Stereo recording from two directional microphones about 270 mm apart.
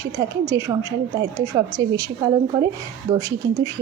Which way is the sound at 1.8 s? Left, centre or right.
Centre.